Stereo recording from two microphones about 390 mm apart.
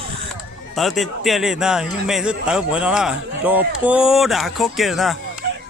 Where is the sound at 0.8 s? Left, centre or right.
Centre.